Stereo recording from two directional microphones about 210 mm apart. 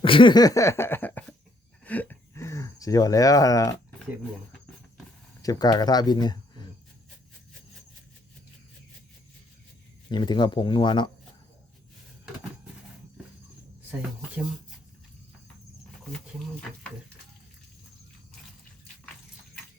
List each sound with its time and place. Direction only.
0.0 s a sound: 25° left (ahead or behind)
4.0 s cricket: centre (ahead or behind)
5.4 s speech: 15° left (ahead or behind)
10.1 s speech: 20° left (ahead or behind)